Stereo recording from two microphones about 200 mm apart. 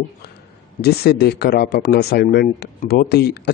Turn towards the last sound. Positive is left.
turn(degrees=55)  # may be behind; listen again after turning